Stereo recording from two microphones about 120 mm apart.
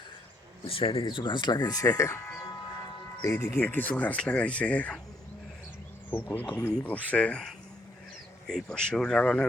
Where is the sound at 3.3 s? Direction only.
15° left (ahead or behind).